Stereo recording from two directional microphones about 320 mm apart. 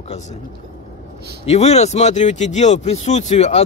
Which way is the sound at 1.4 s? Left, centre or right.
Centre.